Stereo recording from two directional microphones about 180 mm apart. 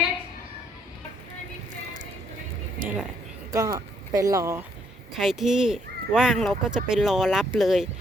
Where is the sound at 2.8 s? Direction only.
50° right (ahead or behind).